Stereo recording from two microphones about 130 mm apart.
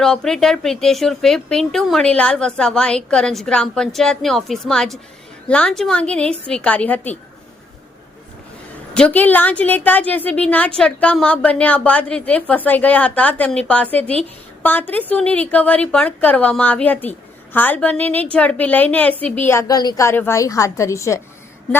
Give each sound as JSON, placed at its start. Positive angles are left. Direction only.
{"t": 0.0, "sound": "a woman's voice", "side_deg": 5}
{"t": 9.0, "sound": "a woman's voice", "side_deg": 10}
{"t": 20.1, "sound": "a woman's voice", "side_deg": 20}